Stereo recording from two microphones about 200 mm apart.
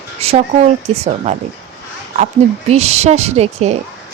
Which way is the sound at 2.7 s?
30° right (ahead or behind).